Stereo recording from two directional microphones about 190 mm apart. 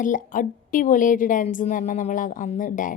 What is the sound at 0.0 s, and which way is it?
A woman's voice, 45° left (ahead or behind).